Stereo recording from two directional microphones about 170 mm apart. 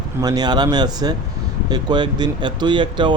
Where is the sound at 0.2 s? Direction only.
25° right (ahead or behind).